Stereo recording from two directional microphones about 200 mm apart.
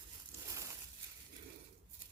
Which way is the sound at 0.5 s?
15° right (ahead or behind).